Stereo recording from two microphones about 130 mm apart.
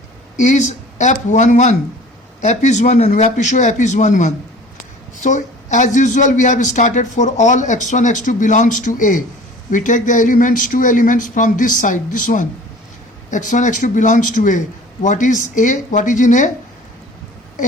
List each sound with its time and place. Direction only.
0.3 s speech: 65° left (ahead or behind)